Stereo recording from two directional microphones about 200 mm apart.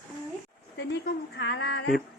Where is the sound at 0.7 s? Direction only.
60° left (ahead or behind).